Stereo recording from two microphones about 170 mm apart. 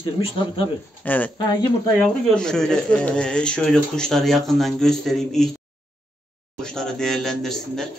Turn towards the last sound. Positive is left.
turn(degrees=0)  # may be behind; listen again after turning